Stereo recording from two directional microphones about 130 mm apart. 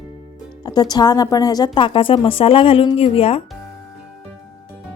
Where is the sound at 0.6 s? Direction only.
30° left (ahead or behind).